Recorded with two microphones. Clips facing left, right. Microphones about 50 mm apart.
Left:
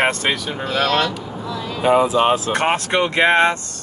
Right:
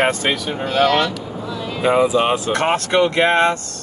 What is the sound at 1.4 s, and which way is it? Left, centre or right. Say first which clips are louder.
Vehicle: even; centre.